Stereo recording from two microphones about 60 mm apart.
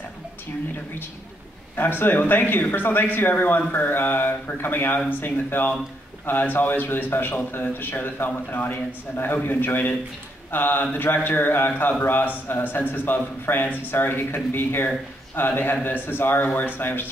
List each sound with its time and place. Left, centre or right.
1.8 s speech: left